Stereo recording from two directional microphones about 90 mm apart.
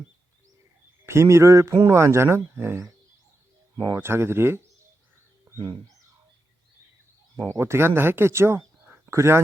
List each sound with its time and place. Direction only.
1.0 s speech: 30° right (ahead or behind)
7.3 s speech: 30° right (ahead or behind)